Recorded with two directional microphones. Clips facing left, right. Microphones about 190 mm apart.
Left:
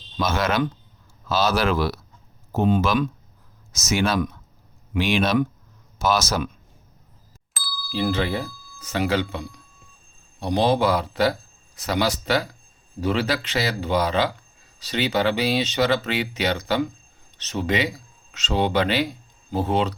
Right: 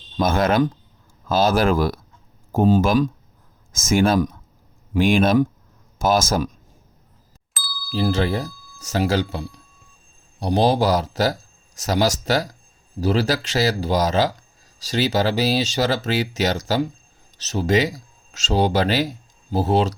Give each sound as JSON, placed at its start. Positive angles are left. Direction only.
{"t": 0.2, "sound": "speech", "side_deg": -50}
{"t": 7.5, "sound": "ding", "side_deg": 0}
{"t": 7.9, "sound": "speech", "side_deg": -40}